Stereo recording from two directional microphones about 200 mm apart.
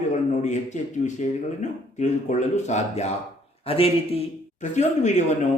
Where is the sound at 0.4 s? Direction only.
35° left (ahead or behind).